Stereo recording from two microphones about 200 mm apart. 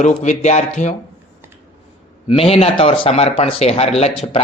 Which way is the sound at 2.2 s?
30° left (ahead or behind).